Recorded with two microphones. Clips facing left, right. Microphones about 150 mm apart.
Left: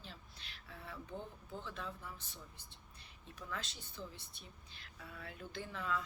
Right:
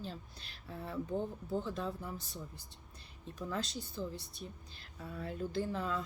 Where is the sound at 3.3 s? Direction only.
35° right (ahead or behind).